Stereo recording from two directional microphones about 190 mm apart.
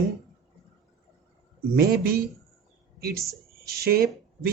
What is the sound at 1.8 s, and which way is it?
Speech, 55° right (ahead or behind).